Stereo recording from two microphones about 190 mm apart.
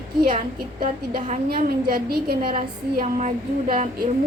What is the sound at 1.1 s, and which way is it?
Speech, 35° right (ahead or behind).